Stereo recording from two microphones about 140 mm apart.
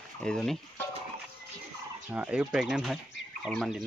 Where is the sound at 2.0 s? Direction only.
10° right (ahead or behind).